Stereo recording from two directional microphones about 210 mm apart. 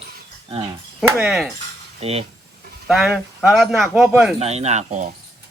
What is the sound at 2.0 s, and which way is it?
Speech, 30° right (ahead or behind).